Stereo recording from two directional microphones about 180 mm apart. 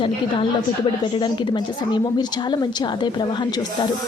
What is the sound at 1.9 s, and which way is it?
A woman's voice, 25° left (ahead or behind).